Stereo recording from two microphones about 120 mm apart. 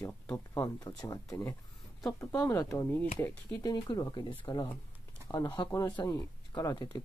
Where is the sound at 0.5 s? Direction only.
30° left (ahead or behind).